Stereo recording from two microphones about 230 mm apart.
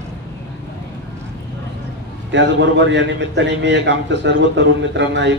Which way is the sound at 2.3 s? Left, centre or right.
Right.